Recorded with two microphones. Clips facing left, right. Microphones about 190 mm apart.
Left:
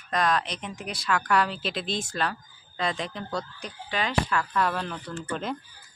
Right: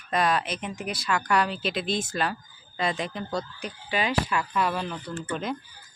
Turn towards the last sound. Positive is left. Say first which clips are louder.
# right 1 dB
turn(degrees=-5)  # may be behind; listen again after turning